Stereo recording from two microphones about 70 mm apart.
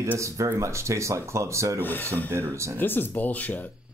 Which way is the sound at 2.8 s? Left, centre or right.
Left.